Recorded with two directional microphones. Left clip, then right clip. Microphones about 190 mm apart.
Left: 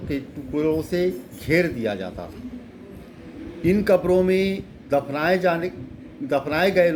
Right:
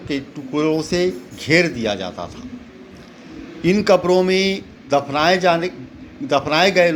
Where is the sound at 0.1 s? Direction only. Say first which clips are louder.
Right 4 dB; 20° right (ahead or behind).